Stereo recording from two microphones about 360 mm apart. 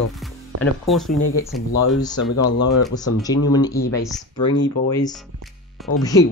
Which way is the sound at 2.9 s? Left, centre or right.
Centre.